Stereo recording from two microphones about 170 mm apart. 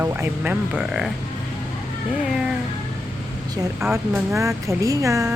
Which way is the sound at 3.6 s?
15° right (ahead or behind).